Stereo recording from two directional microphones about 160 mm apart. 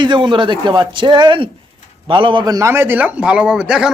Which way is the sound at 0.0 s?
30° right (ahead or behind).